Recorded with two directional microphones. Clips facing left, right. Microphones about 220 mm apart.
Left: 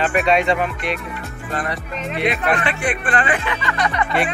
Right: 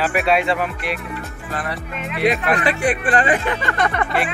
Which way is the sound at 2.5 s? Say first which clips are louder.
Right 3 dB; 40° right (ahead or behind).